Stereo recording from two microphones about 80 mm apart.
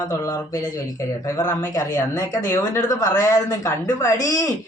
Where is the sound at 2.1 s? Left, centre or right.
Left.